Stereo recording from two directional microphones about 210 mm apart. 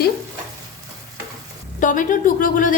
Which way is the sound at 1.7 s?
40° left (ahead or behind).